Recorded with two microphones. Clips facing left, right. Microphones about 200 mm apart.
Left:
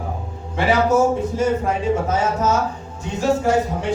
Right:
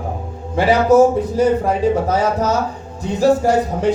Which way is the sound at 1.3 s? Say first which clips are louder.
Right 4 dB; 35° right (ahead or behind).